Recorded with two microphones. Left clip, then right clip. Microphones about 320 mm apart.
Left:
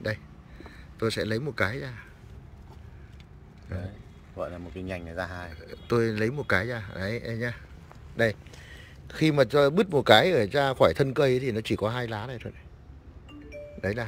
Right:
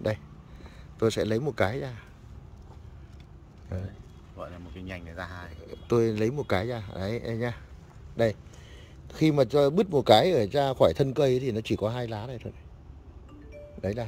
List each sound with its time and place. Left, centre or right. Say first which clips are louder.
0.9 s speech: right 2 dB; centre
3.7 s a man's voice: even; centre
4.4 s speech: left 6 dB; left
5.6 s a man's voice: right 1 dB; centre
9.0 s a man's voice: left 1 dB; centre
13.7 s speech: left 1 dB; centre